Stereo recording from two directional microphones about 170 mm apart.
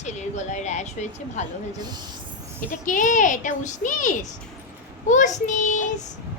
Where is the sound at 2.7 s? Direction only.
50° left (ahead or behind).